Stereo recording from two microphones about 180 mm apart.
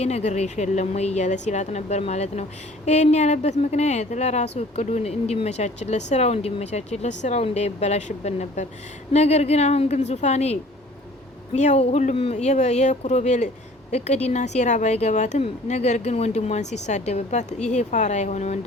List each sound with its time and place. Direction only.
0.0 s speech: 35° left (ahead or behind)